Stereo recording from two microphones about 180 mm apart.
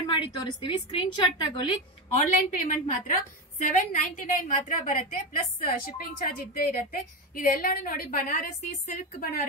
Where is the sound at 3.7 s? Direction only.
45° left (ahead or behind).